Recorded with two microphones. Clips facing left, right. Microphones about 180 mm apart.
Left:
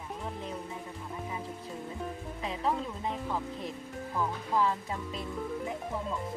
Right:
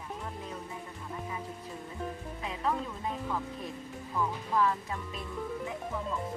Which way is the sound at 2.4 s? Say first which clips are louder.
Left 1 dB; 25° left (ahead or behind).